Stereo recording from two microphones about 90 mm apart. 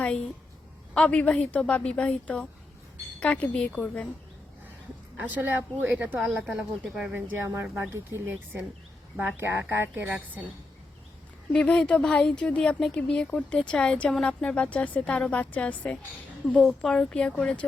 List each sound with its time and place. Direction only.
0.9 s speech: 15° left (ahead or behind)
5.3 s speech: 20° right (ahead or behind)
6.1 s speech: 5° right (ahead or behind)
7.1 s speech: 20° right (ahead or behind)
11.5 s speech: 10° left (ahead or behind)